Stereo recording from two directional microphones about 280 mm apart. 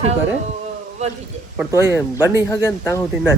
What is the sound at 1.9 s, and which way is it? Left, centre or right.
Speech, centre.